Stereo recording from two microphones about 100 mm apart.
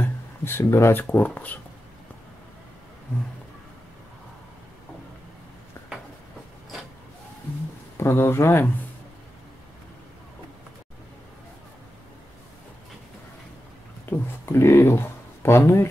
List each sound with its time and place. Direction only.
0.0 s speech: 25° left (ahead or behind)
5.8 s a sound: 25° left (ahead or behind)
8.0 s speech: 25° left (ahead or behind)
14.0 s speech: 25° left (ahead or behind)